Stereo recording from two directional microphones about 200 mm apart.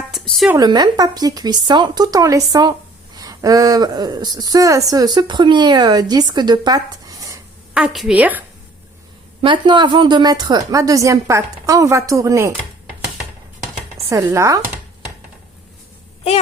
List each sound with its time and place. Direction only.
0.3 s speech: 5° right (ahead or behind)
0.6 s a woman's voice: 20° right (ahead or behind)
7.7 s speech: 5° right (ahead or behind)
9.4 s speech: 25° right (ahead or behind)
14.1 s speech: 15° right (ahead or behind)